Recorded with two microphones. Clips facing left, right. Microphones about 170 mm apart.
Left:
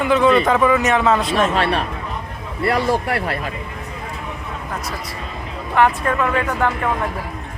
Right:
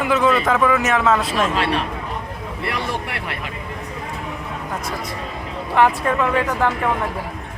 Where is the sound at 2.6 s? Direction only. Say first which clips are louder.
Left 8 dB; 40° left (ahead or behind).